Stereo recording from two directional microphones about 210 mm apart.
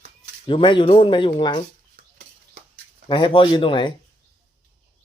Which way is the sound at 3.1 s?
25° left (ahead or behind).